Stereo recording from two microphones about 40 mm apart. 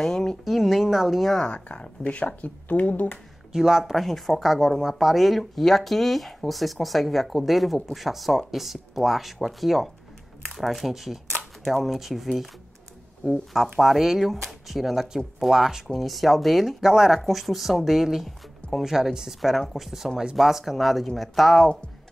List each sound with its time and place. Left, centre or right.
0.0 s speech: centre
0.5 s a sound: centre
1.4 s speech: left
3.5 s speech: centre
13.7 s speech: centre